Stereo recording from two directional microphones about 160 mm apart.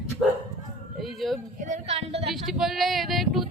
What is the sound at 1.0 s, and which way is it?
Speech, centre (ahead or behind).